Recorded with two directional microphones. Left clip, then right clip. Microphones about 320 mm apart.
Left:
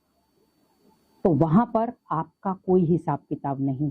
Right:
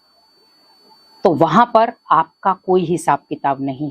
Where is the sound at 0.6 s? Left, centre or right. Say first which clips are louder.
Right 14 dB; centre.